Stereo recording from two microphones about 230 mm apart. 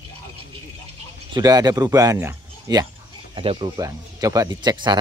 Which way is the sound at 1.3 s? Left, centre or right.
Centre.